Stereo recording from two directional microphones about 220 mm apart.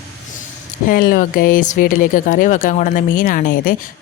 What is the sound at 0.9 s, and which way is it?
Speech, 40° left (ahead or behind).